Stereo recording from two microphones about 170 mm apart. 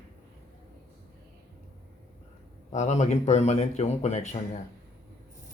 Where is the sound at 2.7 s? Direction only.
45° left (ahead or behind).